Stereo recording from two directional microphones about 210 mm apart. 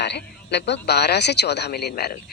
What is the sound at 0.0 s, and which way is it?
A woman's voice, 55° left (ahead or behind).